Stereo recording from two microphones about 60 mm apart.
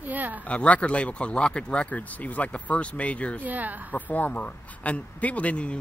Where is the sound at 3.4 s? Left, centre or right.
Right.